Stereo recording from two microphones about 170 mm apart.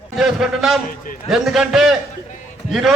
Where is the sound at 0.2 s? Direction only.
Centre (ahead or behind).